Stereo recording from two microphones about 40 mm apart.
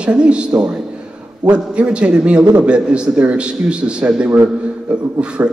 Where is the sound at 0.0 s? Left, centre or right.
Right.